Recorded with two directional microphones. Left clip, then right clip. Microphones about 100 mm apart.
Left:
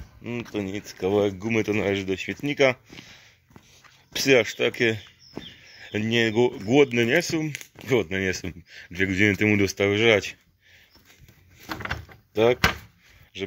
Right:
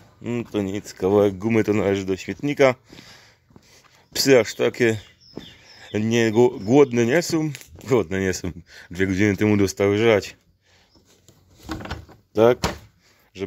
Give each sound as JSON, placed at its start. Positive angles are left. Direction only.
{"t": 0.2, "sound": "speech", "side_deg": -80}
{"t": 1.8, "sound": "speech", "side_deg": -30}
{"t": 2.5, "sound": "speech", "side_deg": -45}
{"t": 4.3, "sound": "speech", "side_deg": -45}
{"t": 5.7, "sound": "speech", "side_deg": -40}
{"t": 6.7, "sound": "speech", "side_deg": -40}
{"t": 7.8, "sound": "speech", "side_deg": -30}
{"t": 8.1, "sound": "speech", "side_deg": -45}
{"t": 12.3, "sound": "speech", "side_deg": -45}